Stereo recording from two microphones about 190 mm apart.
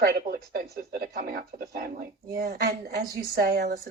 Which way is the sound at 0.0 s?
50° right (ahead or behind).